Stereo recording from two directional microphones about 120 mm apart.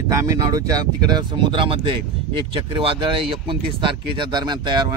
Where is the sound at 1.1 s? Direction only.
40° right (ahead or behind).